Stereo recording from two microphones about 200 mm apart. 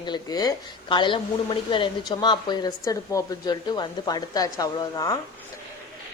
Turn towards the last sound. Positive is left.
turn(degrees=20)  # may be behind; listen again after turning